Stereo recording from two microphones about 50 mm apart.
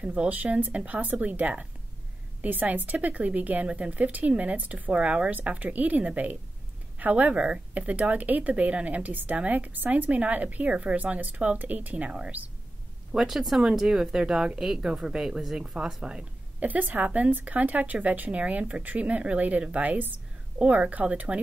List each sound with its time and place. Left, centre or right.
0.0 s speech: right
4.9 s speech: right
7.3 s speech: centre
7.7 s speech: right
13.1 s speech: centre
16.5 s speech: right
20.5 s speech: right